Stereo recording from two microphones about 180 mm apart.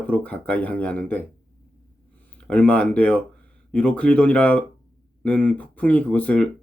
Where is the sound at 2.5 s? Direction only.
5° left (ahead or behind).